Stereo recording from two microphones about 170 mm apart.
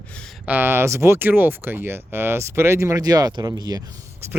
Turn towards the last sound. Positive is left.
turn(degrees=-20)  # may be behind; listen again after turning